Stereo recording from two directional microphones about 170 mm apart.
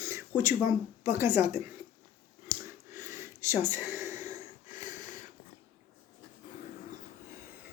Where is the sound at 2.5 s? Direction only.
15° right (ahead or behind).